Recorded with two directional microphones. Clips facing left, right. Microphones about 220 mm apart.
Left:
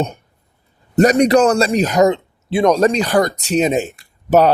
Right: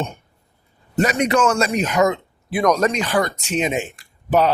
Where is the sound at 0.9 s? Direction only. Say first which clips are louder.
Left 7 dB; 40° left (ahead or behind).